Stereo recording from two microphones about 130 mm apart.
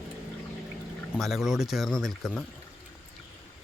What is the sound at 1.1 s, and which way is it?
Speech, centre (ahead or behind).